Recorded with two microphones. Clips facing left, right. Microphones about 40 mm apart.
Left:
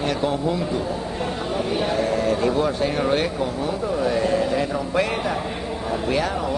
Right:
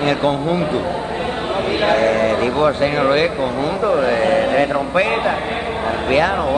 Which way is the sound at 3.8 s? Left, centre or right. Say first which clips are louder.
Right 7 dB; right.